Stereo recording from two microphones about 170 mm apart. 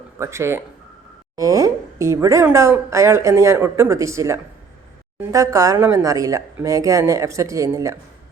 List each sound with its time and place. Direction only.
0.2 s speech: 15° right (ahead or behind)